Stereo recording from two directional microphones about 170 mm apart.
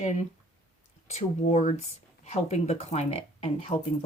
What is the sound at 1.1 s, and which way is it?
Speech, 40° left (ahead or behind).